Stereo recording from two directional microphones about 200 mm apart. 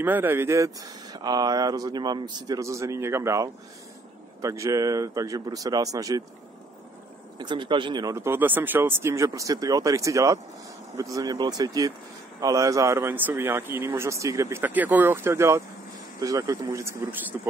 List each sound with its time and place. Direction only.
0.0 s speech: 10° right (ahead or behind)
7.3 s speech: 20° right (ahead or behind)